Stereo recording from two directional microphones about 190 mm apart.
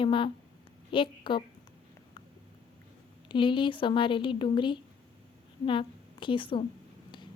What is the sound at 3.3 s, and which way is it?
A woman's voice, 25° left (ahead or behind).